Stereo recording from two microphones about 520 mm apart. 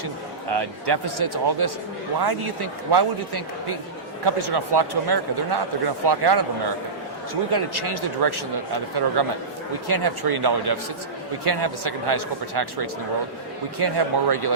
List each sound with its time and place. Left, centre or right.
0.5 s speech: right
7.5 s speech: right